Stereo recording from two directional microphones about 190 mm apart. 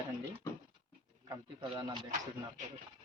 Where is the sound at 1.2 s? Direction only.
20° right (ahead or behind).